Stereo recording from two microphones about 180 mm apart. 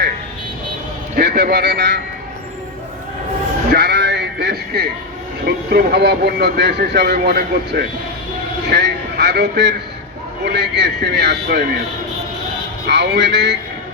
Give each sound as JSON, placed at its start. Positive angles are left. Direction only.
{"t": 1.1, "sound": "a man's voice", "side_deg": -60}
{"t": 3.7, "sound": "sheep", "side_deg": -65}
{"t": 5.5, "sound": "speech", "side_deg": -65}
{"t": 8.7, "sound": "a sound", "side_deg": -65}
{"t": 10.4, "sound": "speech", "side_deg": -70}
{"t": 12.9, "sound": "speech", "side_deg": -70}